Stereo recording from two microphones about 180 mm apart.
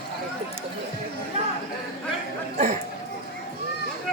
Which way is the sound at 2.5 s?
40° right (ahead or behind).